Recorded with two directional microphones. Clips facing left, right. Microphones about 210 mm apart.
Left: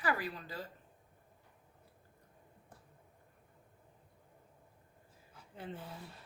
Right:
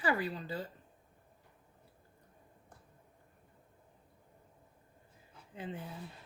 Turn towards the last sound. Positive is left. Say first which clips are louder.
# right 3 dB
turn(degrees=-15)  # may be behind; listen again after turning